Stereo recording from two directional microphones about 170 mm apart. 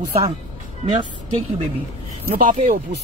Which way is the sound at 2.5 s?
50° right (ahead or behind).